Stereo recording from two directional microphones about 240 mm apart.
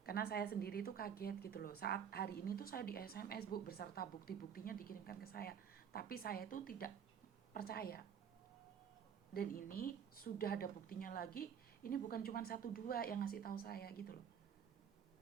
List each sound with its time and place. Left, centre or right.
0.0 s a woman's voice: left
9.3 s a woman's voice: left